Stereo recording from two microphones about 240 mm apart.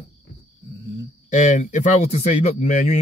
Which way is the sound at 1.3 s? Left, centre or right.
Left.